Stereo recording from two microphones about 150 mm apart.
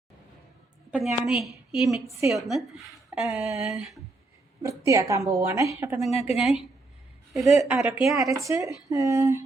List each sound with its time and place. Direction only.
0.9 s a woman's voice: 5° right (ahead or behind)
4.9 s a woman's voice: 20° right (ahead or behind)
6.0 s a woman's voice: 45° left (ahead or behind)
6.3 s a woman's voice: centre (ahead or behind)
7.4 s a woman's voice: 20° right (ahead or behind)
7.8 s a woman's voice: 5° right (ahead or behind)
8.1 s a woman's voice: 20° right (ahead or behind)